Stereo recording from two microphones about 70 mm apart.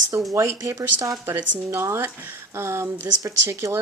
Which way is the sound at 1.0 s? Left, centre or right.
Right.